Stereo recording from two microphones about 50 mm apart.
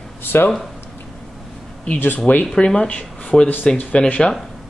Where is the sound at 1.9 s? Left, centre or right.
Left.